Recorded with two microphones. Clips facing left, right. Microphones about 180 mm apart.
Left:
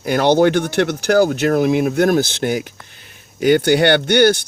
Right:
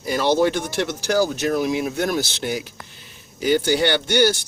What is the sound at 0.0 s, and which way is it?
Speech, 65° left (ahead or behind).